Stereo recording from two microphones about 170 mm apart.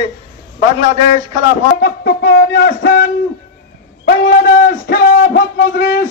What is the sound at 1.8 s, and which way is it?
Speech, 80° left.